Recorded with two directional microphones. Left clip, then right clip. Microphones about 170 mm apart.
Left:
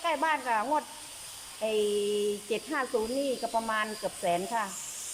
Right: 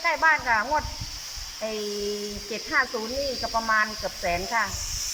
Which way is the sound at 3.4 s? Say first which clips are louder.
Right 6 dB; 20° left (ahead or behind).